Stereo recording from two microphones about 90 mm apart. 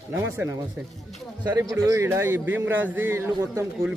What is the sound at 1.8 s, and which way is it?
Speech, 30° right (ahead or behind).